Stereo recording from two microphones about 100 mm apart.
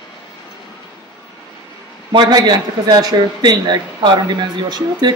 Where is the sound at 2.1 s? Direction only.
45° right (ahead or behind).